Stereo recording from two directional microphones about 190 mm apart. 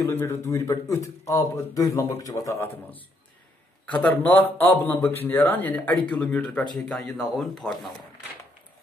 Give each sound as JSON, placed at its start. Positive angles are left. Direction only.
{"t": 0.0, "sound": "speech", "side_deg": 10}